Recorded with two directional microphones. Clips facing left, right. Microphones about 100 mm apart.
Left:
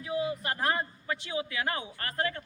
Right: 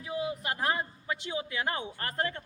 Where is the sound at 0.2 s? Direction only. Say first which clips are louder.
Even; 15° right (ahead or behind).